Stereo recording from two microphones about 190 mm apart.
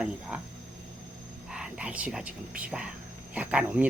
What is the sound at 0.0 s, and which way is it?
Speech, 5° right (ahead or behind).